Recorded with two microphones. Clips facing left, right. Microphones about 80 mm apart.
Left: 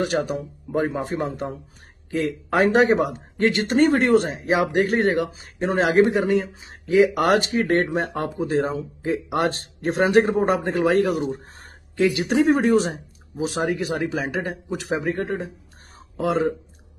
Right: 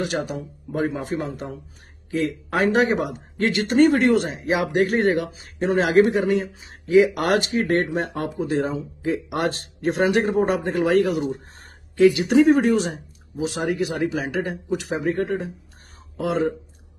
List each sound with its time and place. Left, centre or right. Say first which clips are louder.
0.3 s speech: left 4 dB; left